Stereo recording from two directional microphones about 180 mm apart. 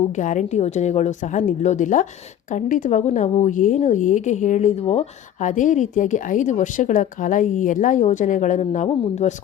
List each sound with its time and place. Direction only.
0.0 s a woman's voice: 40° left (ahead or behind)